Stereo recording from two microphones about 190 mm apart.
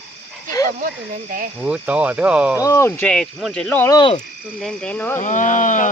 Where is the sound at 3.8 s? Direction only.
25° left (ahead or behind).